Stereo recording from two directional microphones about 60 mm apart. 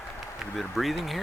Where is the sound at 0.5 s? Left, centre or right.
Centre.